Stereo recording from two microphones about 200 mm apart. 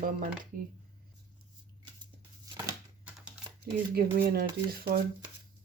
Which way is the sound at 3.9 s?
50° right (ahead or behind).